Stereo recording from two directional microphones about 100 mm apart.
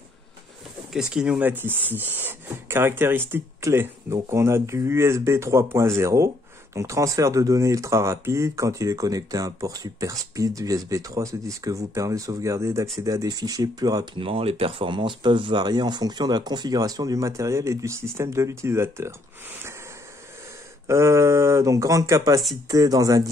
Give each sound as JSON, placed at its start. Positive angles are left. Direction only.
{"t": 0.9, "sound": "speech", "side_deg": -5}
{"t": 1.4, "sound": "speech", "side_deg": -20}
{"t": 14.1, "sound": "speech", "side_deg": -65}
{"t": 20.8, "sound": "speech", "side_deg": -30}